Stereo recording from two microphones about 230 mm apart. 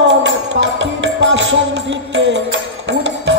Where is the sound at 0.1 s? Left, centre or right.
Right.